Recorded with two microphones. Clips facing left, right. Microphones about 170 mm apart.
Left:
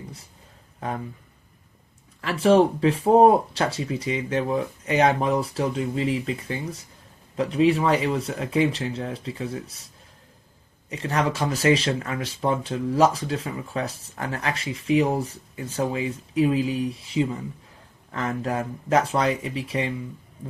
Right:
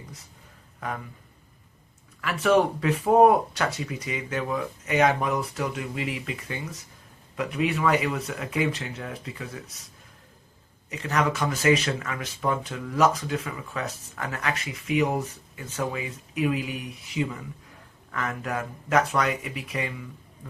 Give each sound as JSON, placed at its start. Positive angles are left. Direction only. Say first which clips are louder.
{"t": 0.8, "sound": "speech", "louder": "left 3 dB", "side_deg": 30}
{"t": 2.2, "sound": "speech", "louder": "left 4 dB", "side_deg": 30}
{"t": 10.8, "sound": "speech", "louder": "left 1 dB", "side_deg": 30}